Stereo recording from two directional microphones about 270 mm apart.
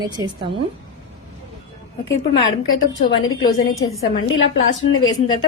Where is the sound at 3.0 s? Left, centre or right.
Left.